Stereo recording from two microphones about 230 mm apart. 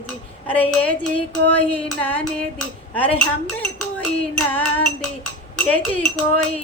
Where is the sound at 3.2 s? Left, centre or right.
Centre.